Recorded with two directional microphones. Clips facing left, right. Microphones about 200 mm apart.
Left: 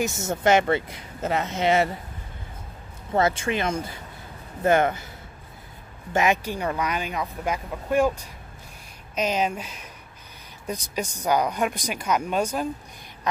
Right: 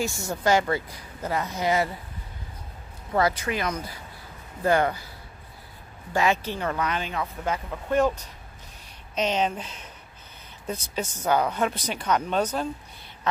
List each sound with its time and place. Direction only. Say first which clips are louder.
0.0 s speech: left 3 dB; 20° left (ahead or behind)
3.2 s speech: left 2 dB; 25° left (ahead or behind)
6.1 s speech: left 1 dB; 15° left (ahead or behind)